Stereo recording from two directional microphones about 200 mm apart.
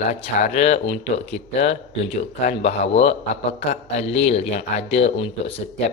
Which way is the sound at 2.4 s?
35° left (ahead or behind).